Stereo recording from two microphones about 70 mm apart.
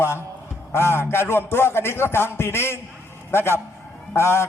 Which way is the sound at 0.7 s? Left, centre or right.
Left.